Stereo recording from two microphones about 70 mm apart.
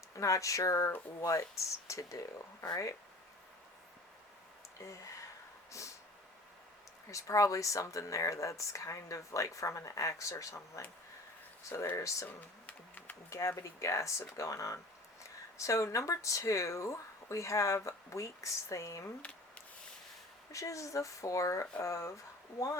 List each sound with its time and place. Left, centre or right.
0.2 s speech: left
7.1 s speech: left
11.7 s speech: left
11.9 s speech: left
12.6 s a sound: left
13.3 s speech: left
19.2 s speech: centre
20.5 s speech: left